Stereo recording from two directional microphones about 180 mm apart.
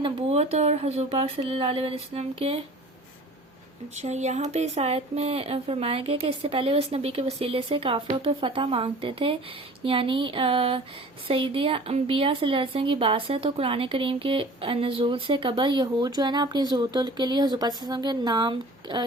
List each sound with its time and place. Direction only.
0.0 s speech: 30° right (ahead or behind)
3.9 s speech: 40° right (ahead or behind)